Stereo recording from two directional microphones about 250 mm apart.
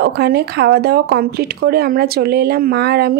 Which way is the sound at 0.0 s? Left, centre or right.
Right.